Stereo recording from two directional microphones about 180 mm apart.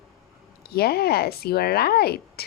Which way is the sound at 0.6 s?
60° left (ahead or behind).